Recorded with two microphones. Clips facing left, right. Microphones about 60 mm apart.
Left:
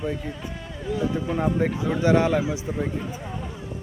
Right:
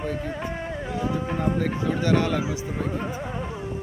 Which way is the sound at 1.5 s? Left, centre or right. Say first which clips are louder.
Left 1 dB; centre.